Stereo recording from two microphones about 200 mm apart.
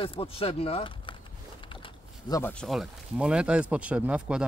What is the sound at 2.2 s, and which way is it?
Speech, 15° left (ahead or behind).